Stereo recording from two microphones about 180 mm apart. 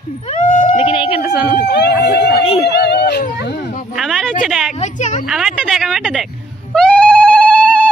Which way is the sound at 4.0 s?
Centre (ahead or behind).